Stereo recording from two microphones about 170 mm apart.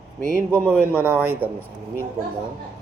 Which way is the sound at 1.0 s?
10° right (ahead or behind).